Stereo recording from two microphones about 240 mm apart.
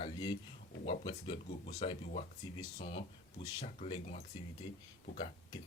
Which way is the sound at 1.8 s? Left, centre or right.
Left.